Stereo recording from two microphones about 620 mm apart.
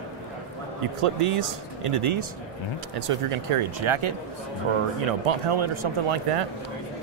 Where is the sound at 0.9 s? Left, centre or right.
Right.